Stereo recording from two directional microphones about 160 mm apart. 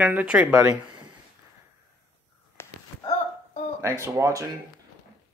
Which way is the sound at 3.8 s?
15° right (ahead or behind).